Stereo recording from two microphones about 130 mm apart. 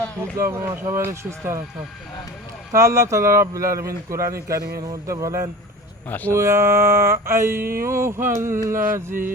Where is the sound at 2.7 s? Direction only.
20° right (ahead or behind).